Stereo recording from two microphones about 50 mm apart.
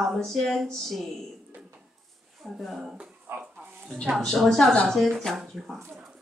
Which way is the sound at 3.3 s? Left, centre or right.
Right.